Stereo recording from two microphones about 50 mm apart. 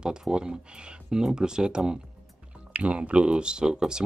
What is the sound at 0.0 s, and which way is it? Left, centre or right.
Speech, centre.